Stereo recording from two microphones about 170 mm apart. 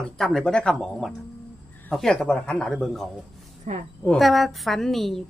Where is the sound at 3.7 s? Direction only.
45° right (ahead or behind).